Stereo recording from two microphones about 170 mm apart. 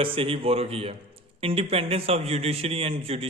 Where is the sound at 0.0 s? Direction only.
30° right (ahead or behind).